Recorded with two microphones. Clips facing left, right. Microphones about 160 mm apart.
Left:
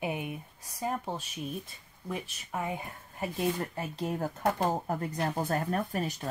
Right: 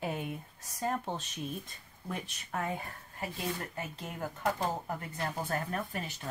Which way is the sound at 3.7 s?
35° left (ahead or behind).